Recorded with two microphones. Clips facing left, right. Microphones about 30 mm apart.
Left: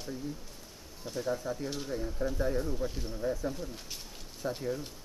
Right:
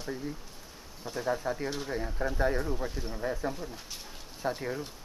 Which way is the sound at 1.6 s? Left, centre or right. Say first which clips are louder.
Right 3 dB; centre.